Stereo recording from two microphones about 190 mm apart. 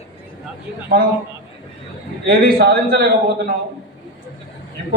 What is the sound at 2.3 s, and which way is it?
Speech, 55° right (ahead or behind).